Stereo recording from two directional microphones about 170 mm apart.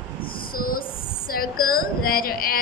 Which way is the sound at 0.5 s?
55° left (ahead or behind).